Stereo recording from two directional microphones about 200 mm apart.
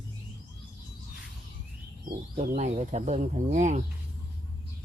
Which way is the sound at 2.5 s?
35° right (ahead or behind).